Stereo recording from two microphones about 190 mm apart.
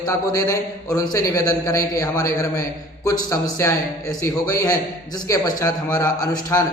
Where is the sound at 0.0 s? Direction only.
20° left (ahead or behind).